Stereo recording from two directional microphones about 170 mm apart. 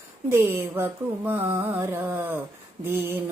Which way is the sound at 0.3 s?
15° right (ahead or behind).